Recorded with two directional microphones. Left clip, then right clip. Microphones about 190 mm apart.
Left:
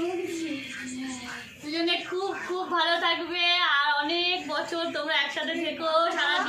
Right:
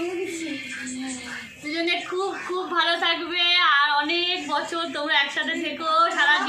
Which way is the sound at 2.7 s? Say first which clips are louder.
Right 3 dB; 20° left (ahead or behind).